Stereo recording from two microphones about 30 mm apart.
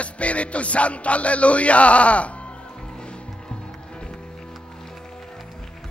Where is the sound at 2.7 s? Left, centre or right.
Left.